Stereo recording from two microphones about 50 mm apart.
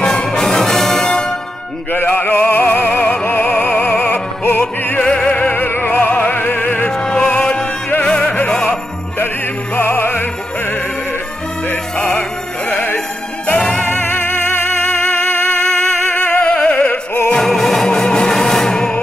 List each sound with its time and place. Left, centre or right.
0.0 s music: centre
1.0 s music: left
1.9 s music: left
5.2 s music: left
6.9 s music: centre
9.8 s opera: left
11.7 s music: left
13.5 s jingle bell: left
13.8 s music: left
16.4 s opera: left
17.3 s music: centre